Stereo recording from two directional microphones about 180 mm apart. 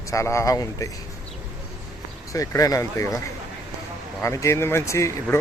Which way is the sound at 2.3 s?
20° left (ahead or behind).